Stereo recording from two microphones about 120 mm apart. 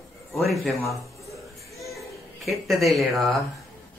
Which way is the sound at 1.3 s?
25° left (ahead or behind).